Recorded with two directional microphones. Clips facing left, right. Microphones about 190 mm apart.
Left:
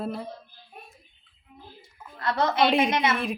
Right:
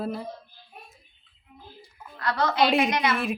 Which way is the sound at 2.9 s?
25° left (ahead or behind).